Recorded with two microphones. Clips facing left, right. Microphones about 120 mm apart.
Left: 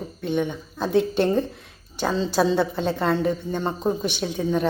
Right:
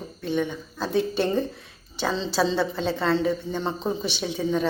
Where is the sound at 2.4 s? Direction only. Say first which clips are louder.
Left 2 dB; 15° left (ahead or behind).